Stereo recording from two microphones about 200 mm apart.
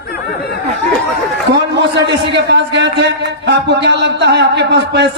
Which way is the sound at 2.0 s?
60° right (ahead or behind).